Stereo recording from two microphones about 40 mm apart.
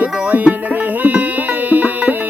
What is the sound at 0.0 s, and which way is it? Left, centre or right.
Music, right.